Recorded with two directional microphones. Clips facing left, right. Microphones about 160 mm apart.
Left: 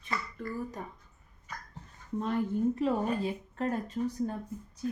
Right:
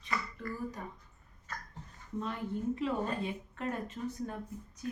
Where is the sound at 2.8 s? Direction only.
35° left (ahead or behind).